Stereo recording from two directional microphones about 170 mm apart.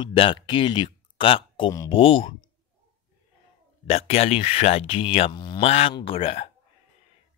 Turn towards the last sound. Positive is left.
turn(degrees=35)  # may be behind; listen again after turning